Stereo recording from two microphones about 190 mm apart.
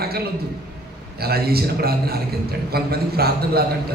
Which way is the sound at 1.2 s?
55° right (ahead or behind).